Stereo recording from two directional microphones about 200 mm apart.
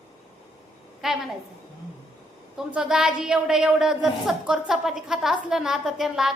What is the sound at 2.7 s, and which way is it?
Speech, 5° right (ahead or behind).